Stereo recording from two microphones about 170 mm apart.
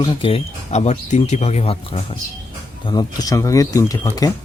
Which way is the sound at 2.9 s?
25° left (ahead or behind).